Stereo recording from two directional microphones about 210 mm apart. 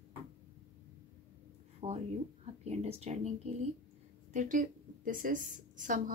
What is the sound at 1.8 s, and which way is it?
A woman's voice, 30° right (ahead or behind).